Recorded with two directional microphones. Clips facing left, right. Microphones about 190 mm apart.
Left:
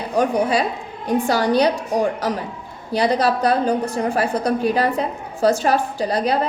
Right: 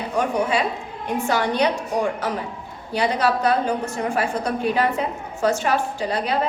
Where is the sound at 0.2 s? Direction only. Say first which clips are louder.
Left 3 dB; 35° left (ahead or behind).